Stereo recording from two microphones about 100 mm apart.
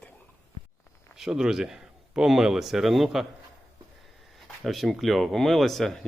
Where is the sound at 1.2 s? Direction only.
5° right (ahead or behind).